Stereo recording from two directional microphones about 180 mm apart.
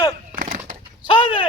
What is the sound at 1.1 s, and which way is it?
Bird, 25° left (ahead or behind).